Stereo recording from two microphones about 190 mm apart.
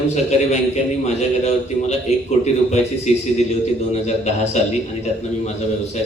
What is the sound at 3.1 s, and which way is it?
Speech, 35° left (ahead or behind).